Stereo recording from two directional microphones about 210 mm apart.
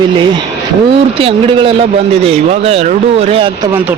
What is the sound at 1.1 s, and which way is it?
Speech, 25° right (ahead or behind).